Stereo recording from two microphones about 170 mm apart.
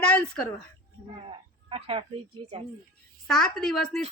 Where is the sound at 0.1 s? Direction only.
5° left (ahead or behind).